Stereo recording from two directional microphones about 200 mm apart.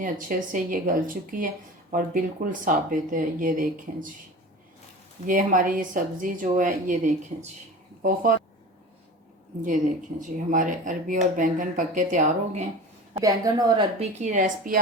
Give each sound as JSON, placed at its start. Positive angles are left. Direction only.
{"t": 0.0, "sound": "speech", "side_deg": -40}
{"t": 5.2, "sound": "speech", "side_deg": -40}
{"t": 9.6, "sound": "speech", "side_deg": -40}
{"t": 13.1, "sound": "a woman's voice", "side_deg": -20}
{"t": 14.0, "sound": "speech", "side_deg": -35}